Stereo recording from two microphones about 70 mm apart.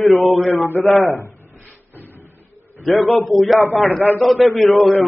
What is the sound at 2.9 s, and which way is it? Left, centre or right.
A man's voice, centre.